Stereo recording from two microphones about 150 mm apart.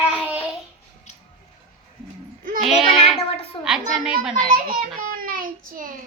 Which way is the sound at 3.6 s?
5° right (ahead or behind).